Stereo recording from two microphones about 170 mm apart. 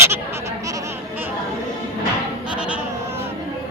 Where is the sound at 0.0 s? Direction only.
15° right (ahead or behind).